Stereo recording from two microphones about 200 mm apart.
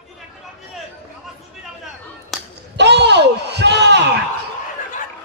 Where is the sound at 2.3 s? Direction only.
Centre (ahead or behind).